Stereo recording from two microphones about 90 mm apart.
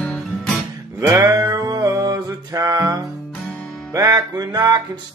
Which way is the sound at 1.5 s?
40° right (ahead or behind).